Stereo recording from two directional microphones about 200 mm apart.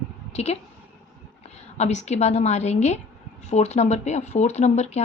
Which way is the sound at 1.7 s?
35° left (ahead or behind).